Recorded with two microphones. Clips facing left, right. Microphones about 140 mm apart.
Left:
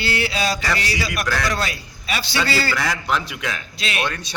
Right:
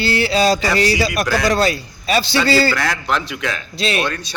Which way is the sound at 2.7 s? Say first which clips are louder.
Right 2 dB; 5° left (ahead or behind).